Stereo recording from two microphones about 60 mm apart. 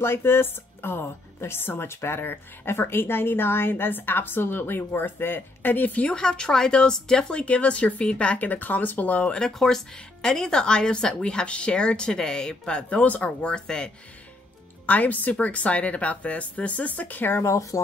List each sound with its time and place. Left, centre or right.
0.0 s a woman's voice: left
6.1 s speech: centre
9.3 s a woman's voice: centre
14.9 s speech: left
17.4 s speech: left